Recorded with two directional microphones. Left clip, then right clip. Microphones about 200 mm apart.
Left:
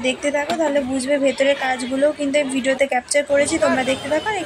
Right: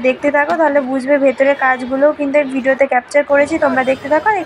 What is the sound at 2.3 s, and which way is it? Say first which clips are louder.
A woman's voice: right 5 dB; 15° left (ahead or behind).